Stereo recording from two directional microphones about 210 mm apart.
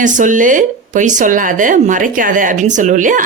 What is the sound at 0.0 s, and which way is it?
Speech, 35° right (ahead or behind).